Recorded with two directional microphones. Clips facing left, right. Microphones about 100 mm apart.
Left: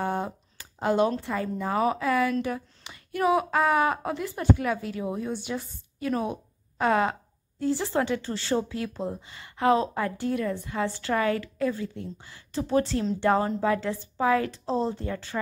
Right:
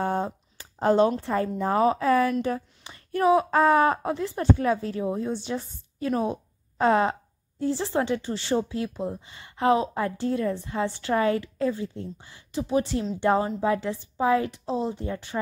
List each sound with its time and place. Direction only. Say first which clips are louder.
0.0 s a sound: right 2 dB; 30° right (ahead or behind)
1.2 s a woman's voice: right 4 dB; 35° right (ahead or behind)
14.7 s speech: left 1 dB; 10° right (ahead or behind)